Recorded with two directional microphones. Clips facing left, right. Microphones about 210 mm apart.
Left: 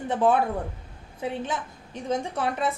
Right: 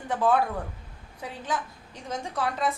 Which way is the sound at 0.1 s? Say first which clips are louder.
Left 2 dB; 20° left (ahead or behind).